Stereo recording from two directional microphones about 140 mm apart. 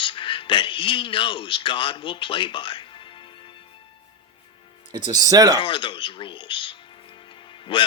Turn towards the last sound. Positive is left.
turn(degrees=35)  # may be behind; listen again after turning